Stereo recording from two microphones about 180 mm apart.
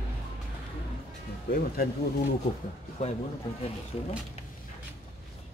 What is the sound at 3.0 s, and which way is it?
Speech, 40° left (ahead or behind).